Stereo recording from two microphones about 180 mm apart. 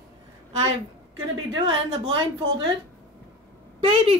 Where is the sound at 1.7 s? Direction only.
25° right (ahead or behind).